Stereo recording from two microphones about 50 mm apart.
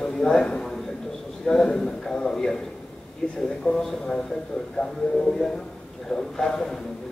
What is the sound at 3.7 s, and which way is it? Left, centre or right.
A man's voice, centre.